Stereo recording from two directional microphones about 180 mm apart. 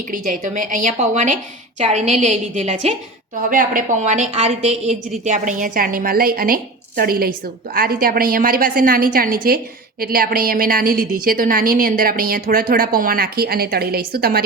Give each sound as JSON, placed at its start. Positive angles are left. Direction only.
{"t": 0.1, "sound": "a woman's voice", "side_deg": -45}